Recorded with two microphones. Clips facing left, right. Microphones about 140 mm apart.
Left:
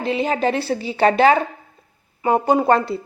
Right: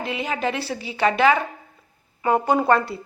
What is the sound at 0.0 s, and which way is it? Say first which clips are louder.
A woman's voice: left 6 dB; 30° left (ahead or behind).